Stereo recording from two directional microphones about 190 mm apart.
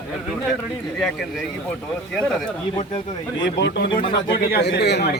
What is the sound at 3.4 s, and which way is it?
A man's voice, 65° left (ahead or behind).